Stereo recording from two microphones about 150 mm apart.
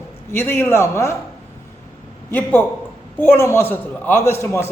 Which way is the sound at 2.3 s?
10° left (ahead or behind).